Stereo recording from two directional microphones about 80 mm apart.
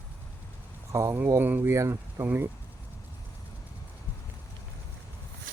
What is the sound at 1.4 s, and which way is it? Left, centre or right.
Speech, right.